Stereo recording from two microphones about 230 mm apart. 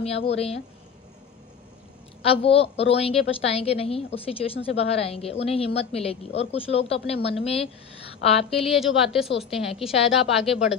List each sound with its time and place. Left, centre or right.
0.0 s a woman's voice: left
2.2 s a woman's voice: left
8.6 s a woman's voice: centre